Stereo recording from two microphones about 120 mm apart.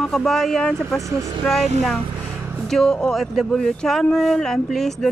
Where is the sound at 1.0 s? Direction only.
25° right (ahead or behind).